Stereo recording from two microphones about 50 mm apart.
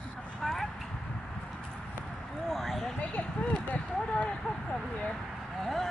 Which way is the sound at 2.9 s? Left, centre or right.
Left.